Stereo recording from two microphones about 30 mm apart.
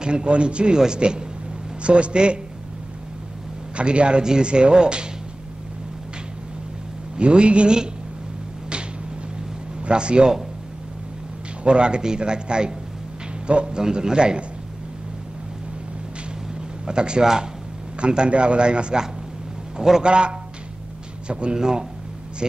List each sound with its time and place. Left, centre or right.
0.0 s a man's voice: right
3.7 s a man's voice: right
4.2 s a man's voice: right
7.2 s a man's voice: right
9.8 s speech: right
11.6 s a man's voice: right
13.7 s a man's voice: right
16.8 s a man's voice: right
17.2 s a man's voice: centre
18.0 s a man's voice: right
20.0 s a man's voice: right
21.5 s a man's voice: right